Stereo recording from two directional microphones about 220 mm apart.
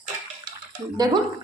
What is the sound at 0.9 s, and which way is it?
Speech, 20° right (ahead or behind).